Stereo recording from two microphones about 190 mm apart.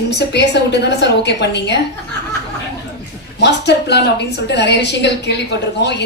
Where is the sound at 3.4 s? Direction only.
65° left (ahead or behind).